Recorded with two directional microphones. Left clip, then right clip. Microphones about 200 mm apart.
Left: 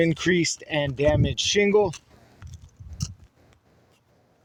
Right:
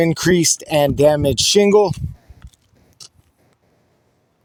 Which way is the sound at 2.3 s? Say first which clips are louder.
Even; 35° right (ahead or behind).